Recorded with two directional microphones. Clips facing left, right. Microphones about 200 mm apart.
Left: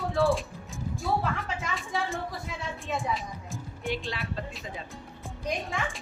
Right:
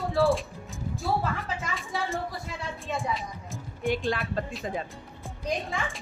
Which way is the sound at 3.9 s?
50° right (ahead or behind).